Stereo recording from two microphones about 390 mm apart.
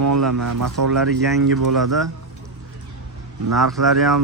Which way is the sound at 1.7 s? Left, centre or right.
Centre.